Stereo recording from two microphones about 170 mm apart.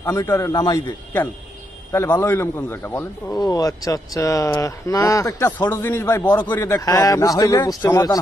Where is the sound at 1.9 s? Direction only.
15° left (ahead or behind).